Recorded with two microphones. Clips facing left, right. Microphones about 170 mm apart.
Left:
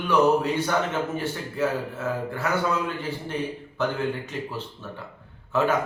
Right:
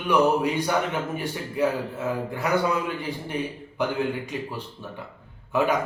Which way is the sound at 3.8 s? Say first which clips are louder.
Even; 15° right (ahead or behind).